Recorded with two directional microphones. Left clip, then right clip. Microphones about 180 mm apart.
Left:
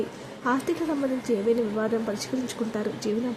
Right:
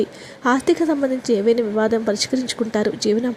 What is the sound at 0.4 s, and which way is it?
Speech, 30° right (ahead or behind).